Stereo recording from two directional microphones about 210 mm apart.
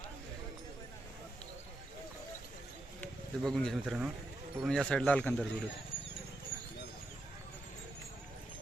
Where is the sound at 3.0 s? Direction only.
Centre (ahead or behind).